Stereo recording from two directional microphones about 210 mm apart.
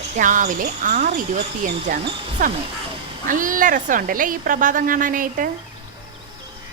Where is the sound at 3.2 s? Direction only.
40° right (ahead or behind).